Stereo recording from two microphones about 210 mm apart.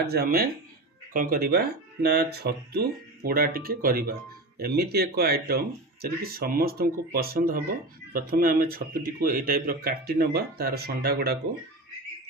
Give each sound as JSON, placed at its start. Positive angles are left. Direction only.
{"t": 0.0, "sound": "speech", "side_deg": -50}